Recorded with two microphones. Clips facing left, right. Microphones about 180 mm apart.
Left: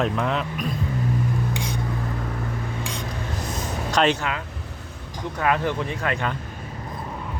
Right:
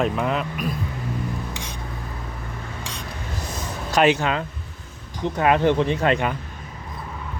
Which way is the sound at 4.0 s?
10° right (ahead or behind).